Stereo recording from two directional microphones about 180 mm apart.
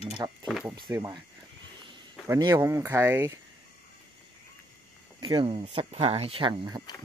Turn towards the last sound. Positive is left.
turn(degrees=-25)  # may be behind; listen again after turning